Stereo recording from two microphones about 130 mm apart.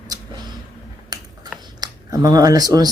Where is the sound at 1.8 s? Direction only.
30° right (ahead or behind).